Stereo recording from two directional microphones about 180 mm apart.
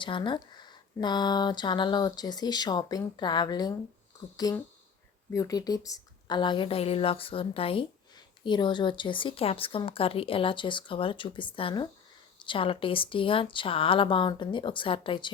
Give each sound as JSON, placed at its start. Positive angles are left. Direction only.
{"t": 0.0, "sound": "a woman's voice", "side_deg": 25}
{"t": 5.3, "sound": "a woman's voice", "side_deg": 20}